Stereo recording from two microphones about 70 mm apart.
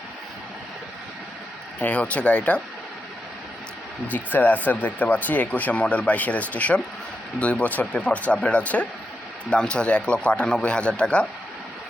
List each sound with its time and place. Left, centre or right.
1.8 s a man's voice: centre
4.1 s a man's voice: left